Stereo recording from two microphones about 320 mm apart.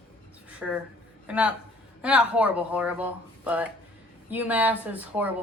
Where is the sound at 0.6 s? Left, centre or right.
Centre.